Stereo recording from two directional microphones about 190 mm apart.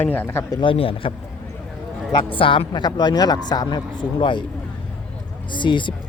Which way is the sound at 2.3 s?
30° left (ahead or behind).